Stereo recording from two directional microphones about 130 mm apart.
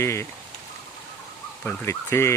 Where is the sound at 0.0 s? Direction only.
20° left (ahead or behind).